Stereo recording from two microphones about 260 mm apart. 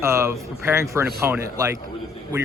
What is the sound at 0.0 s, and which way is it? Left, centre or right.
Speech, centre.